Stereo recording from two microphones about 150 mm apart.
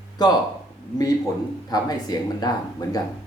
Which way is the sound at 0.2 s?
30° left (ahead or behind).